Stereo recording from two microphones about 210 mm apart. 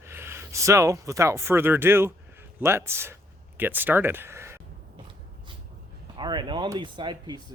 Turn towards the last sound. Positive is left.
turn(degrees=-20)  # may be behind; listen again after turning